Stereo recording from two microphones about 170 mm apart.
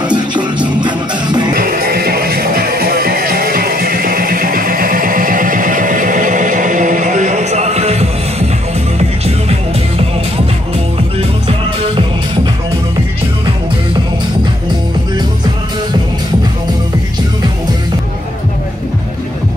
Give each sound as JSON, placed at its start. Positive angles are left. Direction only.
{"t": 0.0, "sound": "music", "side_deg": -25}
{"t": 1.5, "sound": "music", "side_deg": -60}